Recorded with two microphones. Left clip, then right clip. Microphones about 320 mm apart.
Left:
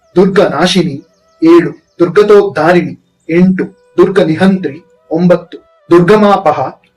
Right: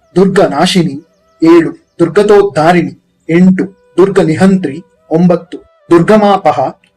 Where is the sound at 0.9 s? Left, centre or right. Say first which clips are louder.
Even; centre.